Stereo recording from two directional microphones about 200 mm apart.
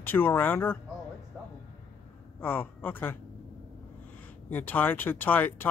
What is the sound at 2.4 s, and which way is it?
Speech, 10° left (ahead or behind).